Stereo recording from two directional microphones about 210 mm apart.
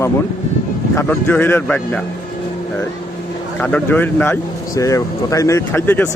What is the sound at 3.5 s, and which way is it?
Speech, 10° left (ahead or behind).